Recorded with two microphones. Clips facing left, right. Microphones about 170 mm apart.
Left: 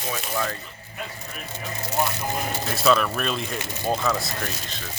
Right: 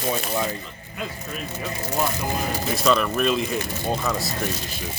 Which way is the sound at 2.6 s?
Centre (ahead or behind).